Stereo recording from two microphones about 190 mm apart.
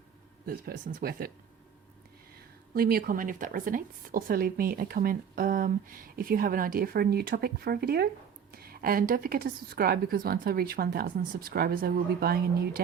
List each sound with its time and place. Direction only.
0.4 s a woman's voice: 50° right (ahead or behind)
2.7 s a woman's voice: 50° right (ahead or behind)